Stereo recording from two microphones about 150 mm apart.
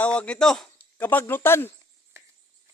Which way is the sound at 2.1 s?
15° right (ahead or behind).